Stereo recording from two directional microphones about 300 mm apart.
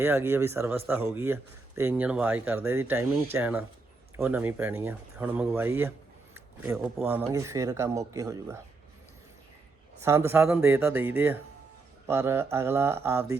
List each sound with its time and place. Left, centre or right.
0.0 s speech: centre
10.0 s speech: centre